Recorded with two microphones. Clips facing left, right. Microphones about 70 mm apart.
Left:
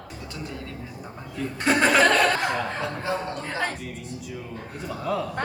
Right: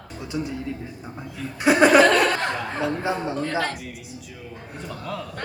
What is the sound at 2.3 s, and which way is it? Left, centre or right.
Speech, centre.